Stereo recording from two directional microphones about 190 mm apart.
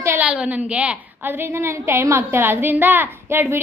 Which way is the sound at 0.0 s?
15° right (ahead or behind).